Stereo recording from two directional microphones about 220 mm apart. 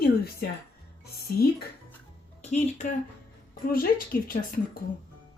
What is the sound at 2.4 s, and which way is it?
A woman's voice, 30° left (ahead or behind).